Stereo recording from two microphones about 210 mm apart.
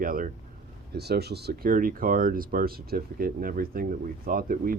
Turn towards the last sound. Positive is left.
turn(degrees=-45)  # may be behind; listen again after turning